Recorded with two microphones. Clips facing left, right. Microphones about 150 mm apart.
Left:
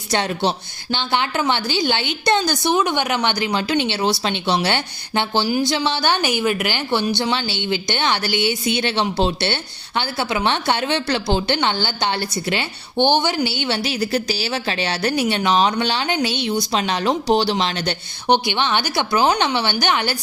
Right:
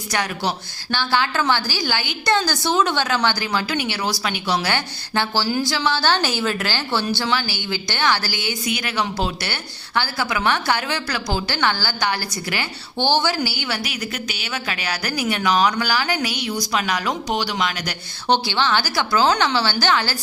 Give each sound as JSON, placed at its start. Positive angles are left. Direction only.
{"t": 0.1, "sound": "a woman's voice", "side_deg": 25}